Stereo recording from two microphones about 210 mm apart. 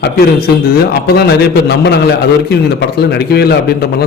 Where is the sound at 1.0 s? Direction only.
50° left (ahead or behind).